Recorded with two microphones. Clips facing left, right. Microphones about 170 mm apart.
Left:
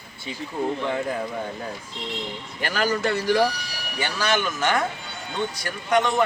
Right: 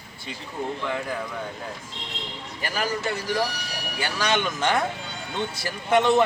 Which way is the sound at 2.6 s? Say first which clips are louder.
Left 4 dB; 70° left (ahead or behind).